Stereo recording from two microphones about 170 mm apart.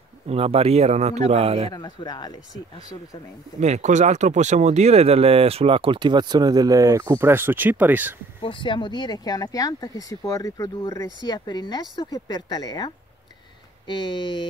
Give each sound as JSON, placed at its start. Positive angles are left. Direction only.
{"t": 0.3, "sound": "speech", "side_deg": -35}
{"t": 1.7, "sound": "speech", "side_deg": 25}
{"t": 3.5, "sound": "speech", "side_deg": -40}
{"t": 8.4, "sound": "speech", "side_deg": 30}